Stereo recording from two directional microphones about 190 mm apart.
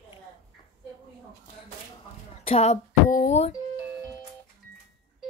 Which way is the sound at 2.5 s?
35° left (ahead or behind).